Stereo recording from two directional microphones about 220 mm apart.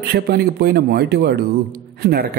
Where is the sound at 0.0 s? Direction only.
45° right (ahead or behind).